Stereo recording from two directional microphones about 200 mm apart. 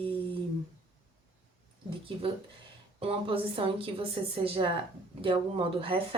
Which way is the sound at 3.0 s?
25° right (ahead or behind).